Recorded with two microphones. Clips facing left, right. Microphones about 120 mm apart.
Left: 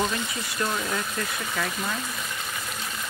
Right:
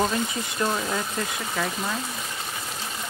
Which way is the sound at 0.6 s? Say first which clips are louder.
Right 2 dB; 20° right (ahead or behind).